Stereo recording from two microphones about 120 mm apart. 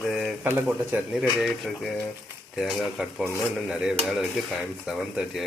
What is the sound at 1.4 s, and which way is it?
Dishes, centre (ahead or behind).